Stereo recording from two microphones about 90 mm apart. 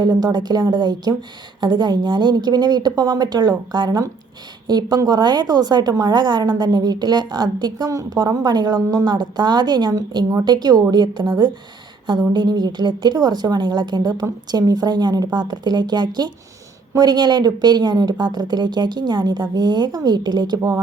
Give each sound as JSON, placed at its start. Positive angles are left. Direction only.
{"t": 0.0, "sound": "a woman's voice", "side_deg": -45}